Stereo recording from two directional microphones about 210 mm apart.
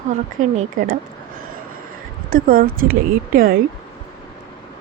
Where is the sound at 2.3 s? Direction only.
40° right (ahead or behind).